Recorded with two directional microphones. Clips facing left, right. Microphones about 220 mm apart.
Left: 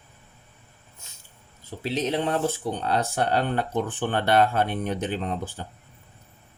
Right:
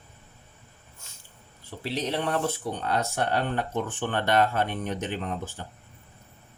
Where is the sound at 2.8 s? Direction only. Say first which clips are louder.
Left 2 dB; 30° left (ahead or behind).